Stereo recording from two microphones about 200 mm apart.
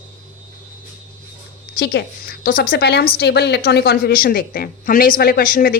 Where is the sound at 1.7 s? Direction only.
50° left (ahead or behind).